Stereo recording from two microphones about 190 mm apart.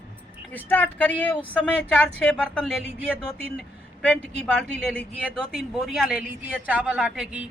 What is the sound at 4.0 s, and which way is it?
A woman's voice, 5° left (ahead or behind).